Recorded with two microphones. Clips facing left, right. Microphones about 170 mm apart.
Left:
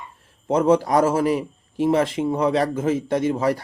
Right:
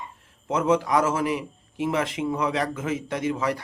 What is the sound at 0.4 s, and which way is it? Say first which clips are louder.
A man's voice: left 5 dB; 35° left (ahead or behind).